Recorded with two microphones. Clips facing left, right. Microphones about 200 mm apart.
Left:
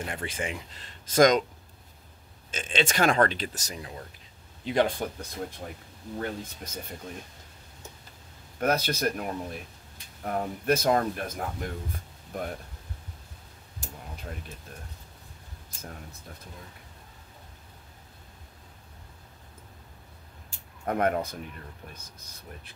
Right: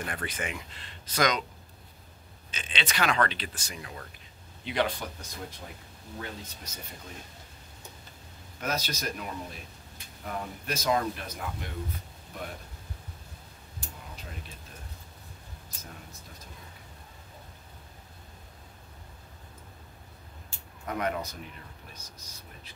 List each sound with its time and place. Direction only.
0.0 s speech: 25° left (ahead or behind)
0.8 s speech: 45° left (ahead or behind)
2.5 s a man's voice: 45° left (ahead or behind)
8.5 s a man's voice: 55° left (ahead or behind)
20.8 s a man's voice: 50° left (ahead or behind)